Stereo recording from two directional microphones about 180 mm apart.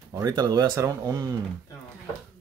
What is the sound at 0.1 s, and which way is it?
Speech, 20° right (ahead or behind).